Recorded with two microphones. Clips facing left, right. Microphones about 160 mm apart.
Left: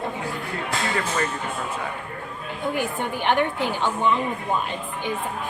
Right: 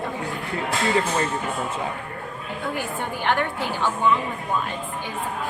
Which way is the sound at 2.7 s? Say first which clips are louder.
Left 4 dB; 20° left (ahead or behind).